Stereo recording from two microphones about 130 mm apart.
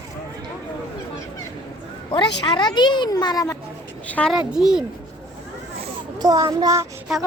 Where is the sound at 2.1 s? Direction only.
40° left (ahead or behind).